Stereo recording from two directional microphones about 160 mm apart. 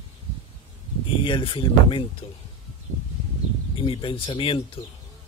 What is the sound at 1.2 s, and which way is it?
Speech, 30° left (ahead or behind).